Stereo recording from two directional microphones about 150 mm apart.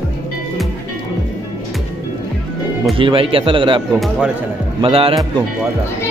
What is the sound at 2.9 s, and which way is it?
Speech, 35° right (ahead or behind).